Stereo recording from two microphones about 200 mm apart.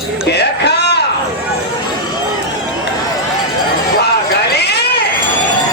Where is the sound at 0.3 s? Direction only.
55° left (ahead or behind).